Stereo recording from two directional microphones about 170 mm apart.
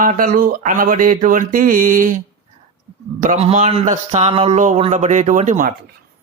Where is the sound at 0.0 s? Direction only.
50° right (ahead or behind).